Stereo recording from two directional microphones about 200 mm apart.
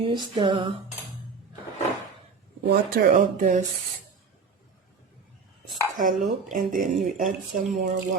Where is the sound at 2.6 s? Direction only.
45° right (ahead or behind).